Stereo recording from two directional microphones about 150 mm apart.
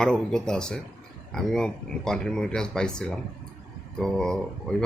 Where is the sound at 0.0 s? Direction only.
5° left (ahead or behind).